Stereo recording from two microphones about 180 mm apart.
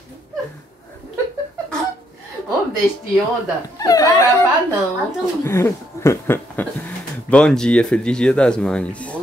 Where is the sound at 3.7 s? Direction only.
20° left (ahead or behind).